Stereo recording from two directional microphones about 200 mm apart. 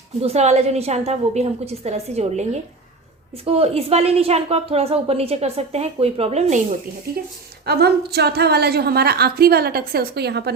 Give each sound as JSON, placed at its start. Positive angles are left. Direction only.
{"t": 0.2, "sound": "a woman's voice", "side_deg": -35}
{"t": 7.6, "sound": "a woman's voice", "side_deg": -55}